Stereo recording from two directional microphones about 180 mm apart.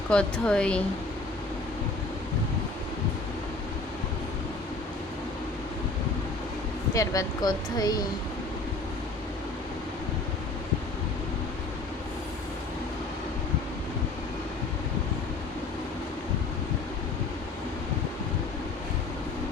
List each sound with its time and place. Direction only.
0.1 s speech: 5° left (ahead or behind)
6.9 s speech: 20° left (ahead or behind)